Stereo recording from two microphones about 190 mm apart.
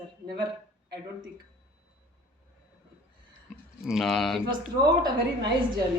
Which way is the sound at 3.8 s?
Centre (ahead or behind).